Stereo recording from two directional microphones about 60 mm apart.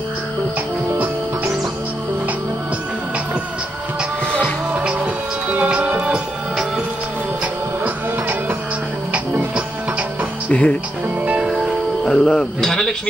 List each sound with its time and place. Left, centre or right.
0.9 s music: right
5.5 s music: right
7.8 s music: right
10.5 s speech: left
11.2 s music: centre
12.0 s speech: centre